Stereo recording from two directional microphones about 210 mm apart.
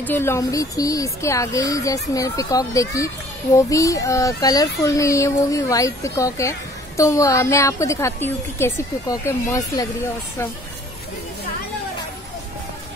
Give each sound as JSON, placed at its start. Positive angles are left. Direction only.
{"t": 0.0, "sound": "a woman's voice", "side_deg": 10}